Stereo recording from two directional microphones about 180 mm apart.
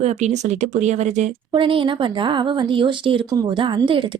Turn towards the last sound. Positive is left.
turn(degrees=-25)  # may be behind; listen again after turning